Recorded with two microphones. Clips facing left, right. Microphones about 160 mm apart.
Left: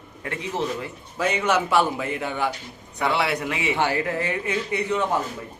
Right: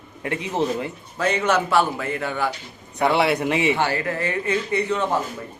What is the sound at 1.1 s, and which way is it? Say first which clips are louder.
A man's voice: right 1 dB; 10° left (ahead or behind).